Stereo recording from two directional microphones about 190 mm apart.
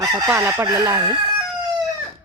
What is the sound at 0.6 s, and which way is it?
Speech, 15° right (ahead or behind).